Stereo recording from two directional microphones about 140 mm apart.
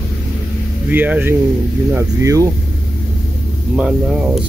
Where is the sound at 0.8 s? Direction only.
10° right (ahead or behind).